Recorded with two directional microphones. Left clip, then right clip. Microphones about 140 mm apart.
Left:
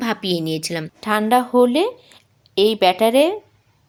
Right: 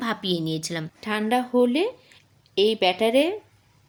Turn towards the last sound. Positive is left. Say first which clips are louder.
# left 6 dB
turn(degrees=15)  # may be behind; listen again after turning